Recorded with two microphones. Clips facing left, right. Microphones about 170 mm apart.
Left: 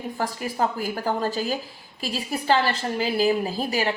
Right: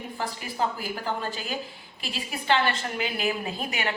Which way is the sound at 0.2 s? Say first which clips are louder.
Left 4 dB; 45° left (ahead or behind).